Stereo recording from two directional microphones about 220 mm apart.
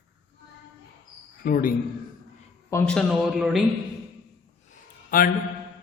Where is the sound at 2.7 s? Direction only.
5° left (ahead or behind).